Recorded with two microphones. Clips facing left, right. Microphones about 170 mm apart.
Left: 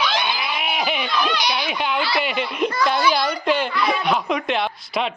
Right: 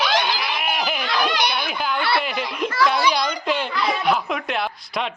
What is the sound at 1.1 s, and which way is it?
Baby cry, 65° right (ahead or behind).